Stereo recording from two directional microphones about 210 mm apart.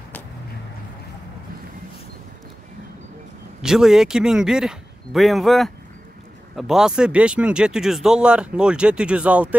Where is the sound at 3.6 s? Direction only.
Centre (ahead or behind).